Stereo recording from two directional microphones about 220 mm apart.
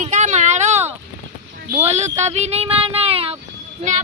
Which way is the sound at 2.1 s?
30° right (ahead or behind).